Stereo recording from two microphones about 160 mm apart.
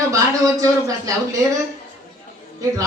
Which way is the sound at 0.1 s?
20° right (ahead or behind).